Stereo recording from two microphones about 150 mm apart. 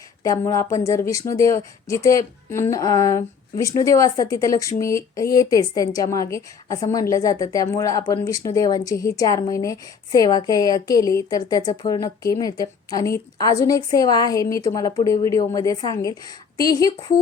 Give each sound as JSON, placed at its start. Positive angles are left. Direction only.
{"t": 0.2, "sound": "a woman's voice", "side_deg": 20}